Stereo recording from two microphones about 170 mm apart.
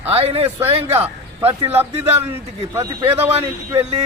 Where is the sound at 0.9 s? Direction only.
10° right (ahead or behind).